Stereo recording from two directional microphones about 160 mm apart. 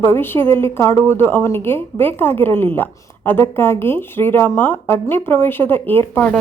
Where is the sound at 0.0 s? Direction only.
15° left (ahead or behind).